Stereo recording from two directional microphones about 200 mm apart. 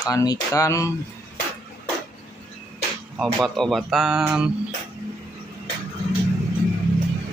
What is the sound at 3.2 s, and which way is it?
Speech, centre (ahead or behind).